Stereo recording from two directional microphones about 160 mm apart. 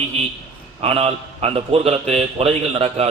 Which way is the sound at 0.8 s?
40° right (ahead or behind).